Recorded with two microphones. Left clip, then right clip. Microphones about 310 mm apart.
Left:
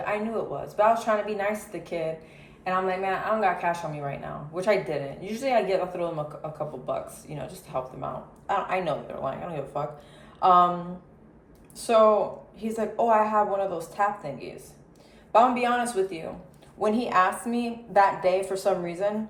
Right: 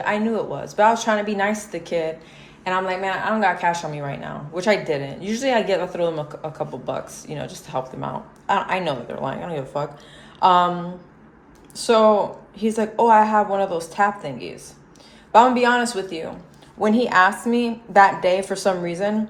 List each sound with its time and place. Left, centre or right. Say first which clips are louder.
0.0 s speech: right 6 dB; right
11.7 s speech: right 4 dB; right